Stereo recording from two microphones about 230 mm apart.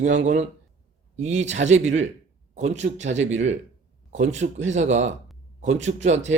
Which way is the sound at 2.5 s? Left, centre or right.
Right.